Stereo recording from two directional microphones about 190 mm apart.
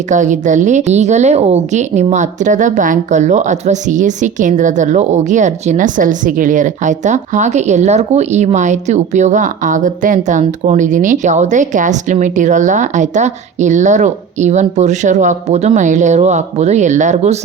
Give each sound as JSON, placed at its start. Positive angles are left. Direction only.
{"t": 0.1, "sound": "a woman's voice", "side_deg": -40}